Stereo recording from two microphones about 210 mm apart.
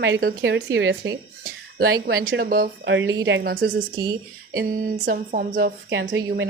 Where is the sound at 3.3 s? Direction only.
50° right (ahead or behind).